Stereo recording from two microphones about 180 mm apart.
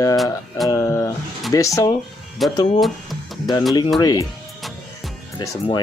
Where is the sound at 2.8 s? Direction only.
Centre (ahead or behind).